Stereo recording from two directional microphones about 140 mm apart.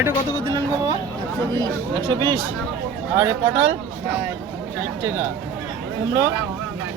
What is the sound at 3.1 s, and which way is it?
Speech, 20° right (ahead or behind).